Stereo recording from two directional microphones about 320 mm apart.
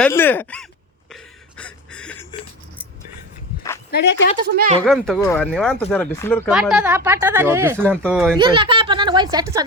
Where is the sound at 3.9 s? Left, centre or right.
Left.